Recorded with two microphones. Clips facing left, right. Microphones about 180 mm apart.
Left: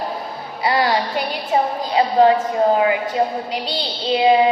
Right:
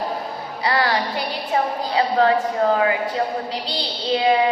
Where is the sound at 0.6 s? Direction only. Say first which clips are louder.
Left 3 dB; 25° left (ahead or behind).